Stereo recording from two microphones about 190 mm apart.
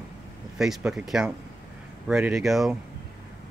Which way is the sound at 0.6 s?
Centre (ahead or behind).